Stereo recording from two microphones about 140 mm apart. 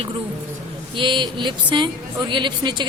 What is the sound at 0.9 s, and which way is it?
A woman's voice, 35° right (ahead or behind).